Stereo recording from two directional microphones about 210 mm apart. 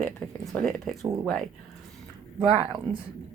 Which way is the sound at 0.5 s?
Centre (ahead or behind).